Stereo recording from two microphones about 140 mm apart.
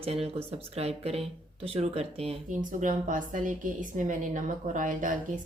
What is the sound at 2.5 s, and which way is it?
A woman's voice, 65° right (ahead or behind).